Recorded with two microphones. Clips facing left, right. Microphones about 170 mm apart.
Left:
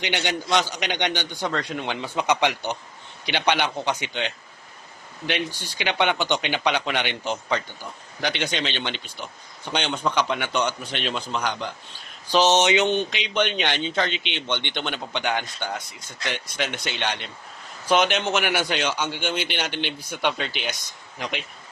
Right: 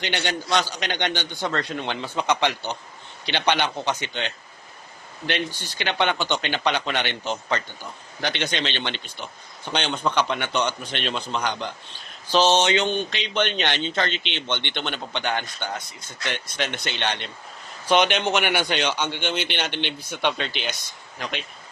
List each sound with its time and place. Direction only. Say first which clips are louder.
0.0 s speech: left 1 dB; 15° left (ahead or behind)